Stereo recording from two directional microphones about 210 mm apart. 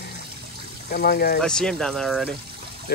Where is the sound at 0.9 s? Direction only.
45° left (ahead or behind).